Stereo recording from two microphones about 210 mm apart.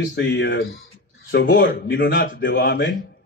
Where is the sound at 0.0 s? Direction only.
60° left (ahead or behind).